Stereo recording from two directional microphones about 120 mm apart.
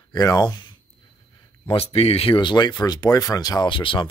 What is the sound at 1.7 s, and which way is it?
Speech, 55° left (ahead or behind).